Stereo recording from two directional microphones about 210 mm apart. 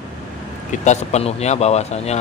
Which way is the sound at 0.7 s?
35° left (ahead or behind).